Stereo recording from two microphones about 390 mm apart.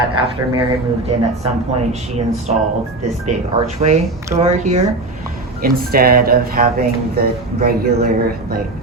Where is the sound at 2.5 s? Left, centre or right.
Centre.